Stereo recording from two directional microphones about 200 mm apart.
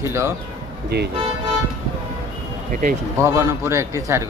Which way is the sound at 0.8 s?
55° right (ahead or behind).